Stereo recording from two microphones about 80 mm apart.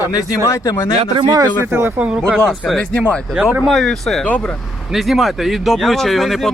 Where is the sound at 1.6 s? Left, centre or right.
Right.